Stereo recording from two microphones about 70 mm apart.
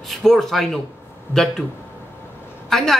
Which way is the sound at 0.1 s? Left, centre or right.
Centre.